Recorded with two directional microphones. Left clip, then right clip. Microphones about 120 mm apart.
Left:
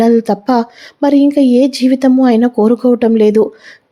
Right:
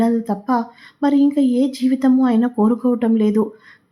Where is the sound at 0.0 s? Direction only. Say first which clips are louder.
Left 9 dB; 45° left (ahead or behind).